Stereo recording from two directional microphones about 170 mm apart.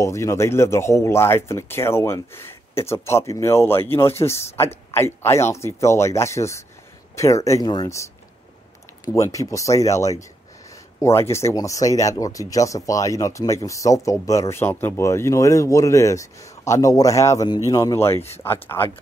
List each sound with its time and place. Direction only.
0.0 s speech: 15° left (ahead or behind)